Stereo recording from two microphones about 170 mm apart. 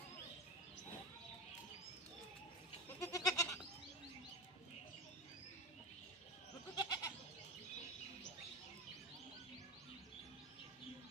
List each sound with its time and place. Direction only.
3.0 s goat: 20° left (ahead or behind)
6.7 s goat: 25° left (ahead or behind)